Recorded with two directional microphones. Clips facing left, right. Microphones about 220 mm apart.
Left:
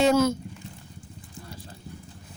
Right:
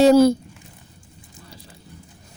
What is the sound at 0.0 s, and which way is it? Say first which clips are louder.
Speech: right 8 dB; 35° right (ahead or behind).